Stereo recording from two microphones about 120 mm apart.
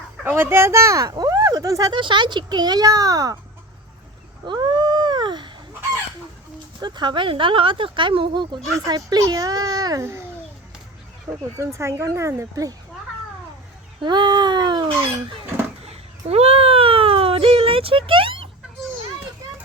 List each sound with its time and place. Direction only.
0.3 s speech: 20° right (ahead or behind)
4.4 s a sound: 40° right (ahead or behind)
6.7 s speech: 40° right (ahead or behind)
11.5 s speech: 25° right (ahead or behind)
14.0 s speech: 40° right (ahead or behind)
15.8 s a sound: 55° right (ahead or behind)